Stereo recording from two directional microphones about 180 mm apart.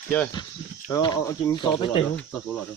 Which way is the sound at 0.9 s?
20° left (ahead or behind).